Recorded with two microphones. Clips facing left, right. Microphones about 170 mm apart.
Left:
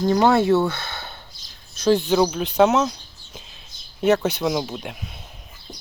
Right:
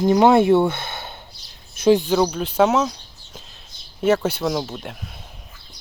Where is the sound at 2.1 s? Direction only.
Centre (ahead or behind).